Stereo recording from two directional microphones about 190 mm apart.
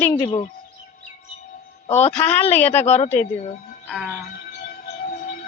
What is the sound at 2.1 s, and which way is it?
Speech, 10° left (ahead or behind).